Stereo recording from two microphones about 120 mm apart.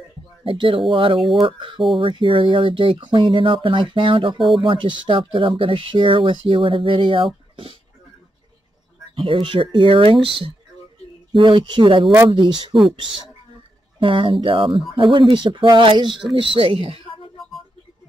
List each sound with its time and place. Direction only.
0.4 s speech: 45° right (ahead or behind)
9.1 s speech: 45° right (ahead or behind)
13.9 s speech: 45° right (ahead or behind)